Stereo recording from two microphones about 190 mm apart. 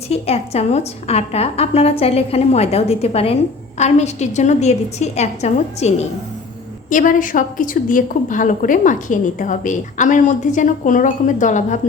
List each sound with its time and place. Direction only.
0.1 s a woman's voice: 35° left (ahead or behind)
6.9 s a woman's voice: 45° left (ahead or behind)